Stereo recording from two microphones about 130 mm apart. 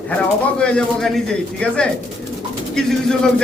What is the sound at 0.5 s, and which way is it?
A man's voice, 5° left (ahead or behind).